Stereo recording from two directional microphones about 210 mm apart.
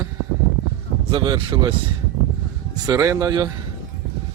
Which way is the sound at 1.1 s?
20° right (ahead or behind).